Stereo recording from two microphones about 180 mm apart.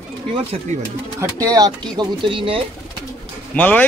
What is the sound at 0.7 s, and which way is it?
Speech, 40° right (ahead or behind).